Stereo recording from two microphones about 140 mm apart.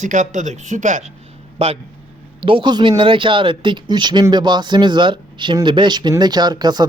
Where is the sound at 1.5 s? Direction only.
45° right (ahead or behind).